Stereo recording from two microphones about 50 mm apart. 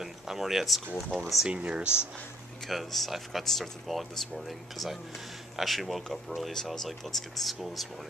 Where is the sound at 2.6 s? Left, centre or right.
Centre.